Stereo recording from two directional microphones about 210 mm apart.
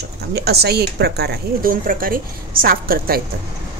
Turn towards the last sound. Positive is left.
turn(degrees=-45)  # may be behind; listen again after turning